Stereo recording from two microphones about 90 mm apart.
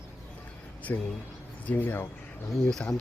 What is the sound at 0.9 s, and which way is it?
Speech, 30° left (ahead or behind).